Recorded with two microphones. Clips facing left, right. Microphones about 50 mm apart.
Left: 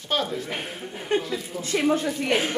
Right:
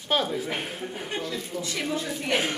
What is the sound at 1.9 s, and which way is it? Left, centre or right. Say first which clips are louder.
Speech: left 4 dB; left.